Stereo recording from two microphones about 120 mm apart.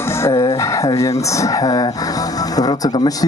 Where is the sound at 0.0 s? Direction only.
20° left (ahead or behind).